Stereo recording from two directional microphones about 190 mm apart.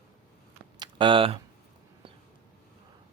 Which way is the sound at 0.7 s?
25° right (ahead or behind).